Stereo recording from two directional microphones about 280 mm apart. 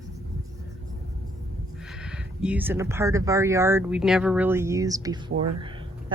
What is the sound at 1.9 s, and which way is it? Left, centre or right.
Speech, centre.